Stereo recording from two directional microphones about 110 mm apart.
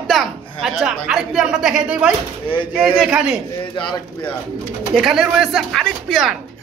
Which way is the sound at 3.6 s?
45° left (ahead or behind).